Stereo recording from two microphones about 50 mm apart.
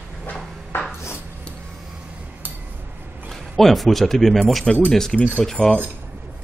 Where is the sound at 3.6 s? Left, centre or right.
Centre.